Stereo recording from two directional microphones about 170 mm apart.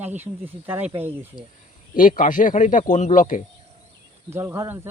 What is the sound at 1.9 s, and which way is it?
A man's voice, 50° left (ahead or behind).